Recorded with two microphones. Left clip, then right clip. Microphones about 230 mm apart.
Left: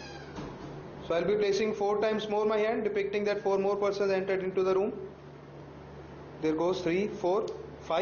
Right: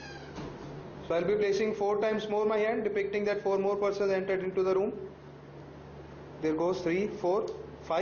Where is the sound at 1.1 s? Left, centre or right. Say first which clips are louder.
Even; centre.